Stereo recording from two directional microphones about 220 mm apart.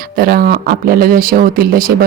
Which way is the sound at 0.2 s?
40° right (ahead or behind).